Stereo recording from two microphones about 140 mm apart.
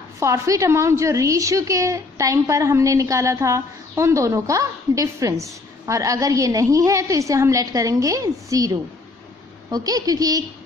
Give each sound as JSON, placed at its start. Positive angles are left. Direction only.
{"t": 0.2, "sound": "a woman's voice", "side_deg": -20}